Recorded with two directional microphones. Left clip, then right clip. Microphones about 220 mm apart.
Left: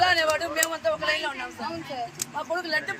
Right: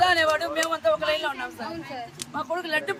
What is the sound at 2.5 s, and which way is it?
Speech, 30° right (ahead or behind).